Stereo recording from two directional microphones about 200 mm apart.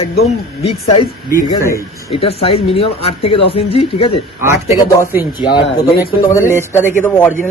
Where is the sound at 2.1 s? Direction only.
30° left (ahead or behind).